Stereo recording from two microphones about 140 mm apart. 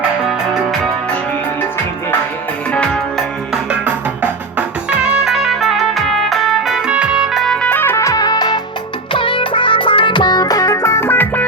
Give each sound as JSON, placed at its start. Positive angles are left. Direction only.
{"t": 0.3, "sound": "music", "side_deg": -5}
{"t": 2.7, "sound": "music", "side_deg": 5}
{"t": 3.5, "sound": "music", "side_deg": -10}